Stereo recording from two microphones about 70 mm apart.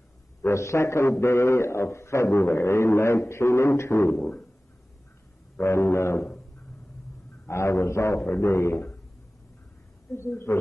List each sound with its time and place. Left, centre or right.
0.4 s a man's voice: left
4.2 s a sound: centre
5.6 s a man's voice: left
7.4 s a man's voice: left
10.1 s a man's voice: left